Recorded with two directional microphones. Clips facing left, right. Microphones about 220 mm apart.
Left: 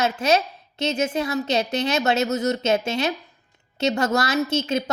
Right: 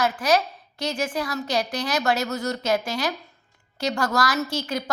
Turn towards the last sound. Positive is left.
turn(degrees=25)  # may be behind; listen again after turning